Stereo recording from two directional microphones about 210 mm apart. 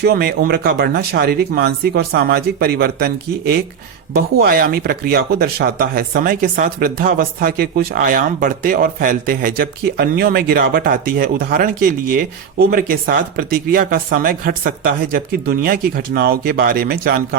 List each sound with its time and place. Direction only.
0.0 s speech: 50° right (ahead or behind)